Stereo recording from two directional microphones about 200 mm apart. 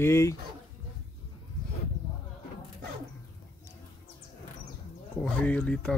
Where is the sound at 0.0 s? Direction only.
15° left (ahead or behind).